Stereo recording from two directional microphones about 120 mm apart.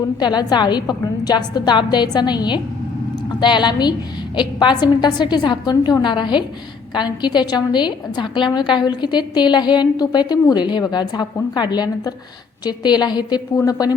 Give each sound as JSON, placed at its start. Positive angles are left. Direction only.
{"t": 0.2, "sound": "a woman's voice", "side_deg": 35}